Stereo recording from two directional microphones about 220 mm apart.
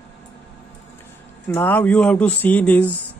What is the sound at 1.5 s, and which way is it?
Speech, 10° left (ahead or behind).